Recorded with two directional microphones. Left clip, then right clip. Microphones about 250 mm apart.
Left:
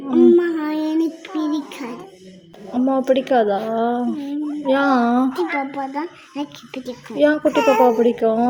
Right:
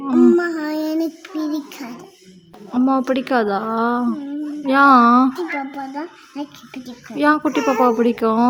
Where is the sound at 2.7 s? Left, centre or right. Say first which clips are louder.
Left 1 dB; centre.